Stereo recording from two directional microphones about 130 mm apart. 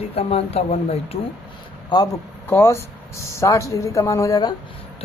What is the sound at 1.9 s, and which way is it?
Speech, 35° left (ahead or behind).